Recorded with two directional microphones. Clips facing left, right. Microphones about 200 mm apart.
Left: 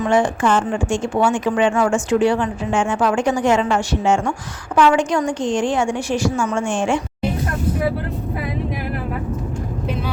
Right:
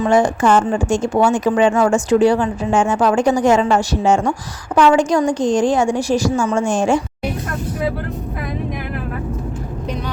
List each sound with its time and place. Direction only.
0.0 s a woman's voice: 40° right (ahead or behind)